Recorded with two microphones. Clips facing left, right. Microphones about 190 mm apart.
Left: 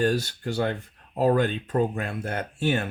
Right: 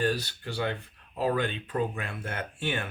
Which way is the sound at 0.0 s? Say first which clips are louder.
Left 5 dB; 45° left (ahead or behind).